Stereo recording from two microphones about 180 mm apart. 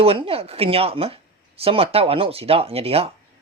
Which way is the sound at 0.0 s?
30° right (ahead or behind).